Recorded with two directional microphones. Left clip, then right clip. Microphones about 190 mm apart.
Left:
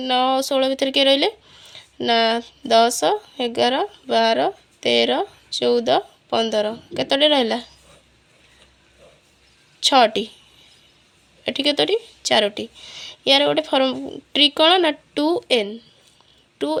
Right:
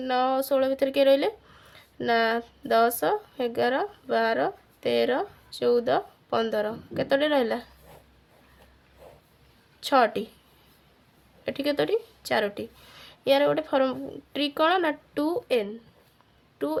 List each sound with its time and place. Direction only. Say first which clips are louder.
0.0 s speech: left 6 dB; 25° left (ahead or behind)
9.8 s speech: left 7 dB; 20° left (ahead or behind)
11.4 s speech: left 7 dB; 20° left (ahead or behind)